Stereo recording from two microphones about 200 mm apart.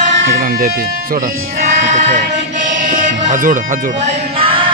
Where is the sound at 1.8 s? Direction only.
35° right (ahead or behind).